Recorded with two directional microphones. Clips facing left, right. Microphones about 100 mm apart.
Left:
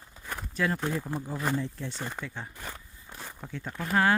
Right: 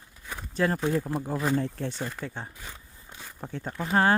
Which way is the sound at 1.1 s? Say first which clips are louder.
Right 5 dB; 65° right (ahead or behind).